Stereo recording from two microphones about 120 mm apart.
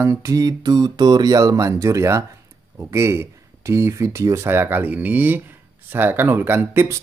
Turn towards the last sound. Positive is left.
turn(degrees=-20)  # may be behind; listen again after turning